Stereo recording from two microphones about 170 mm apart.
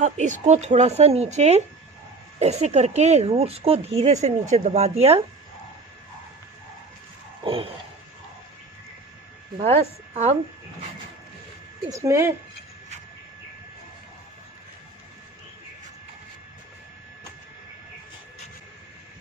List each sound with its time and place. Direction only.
0.0 s speech: 45° right (ahead or behind)
9.6 s speech: 40° right (ahead or behind)
11.9 s speech: 15° right (ahead or behind)